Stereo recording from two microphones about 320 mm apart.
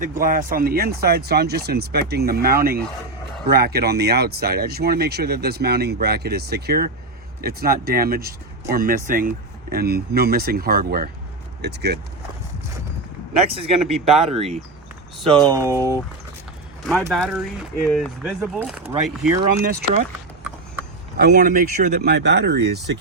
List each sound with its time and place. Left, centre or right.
0.0 s speech: right
13.5 s speech: centre
19.6 s speech: right
21.2 s speech: right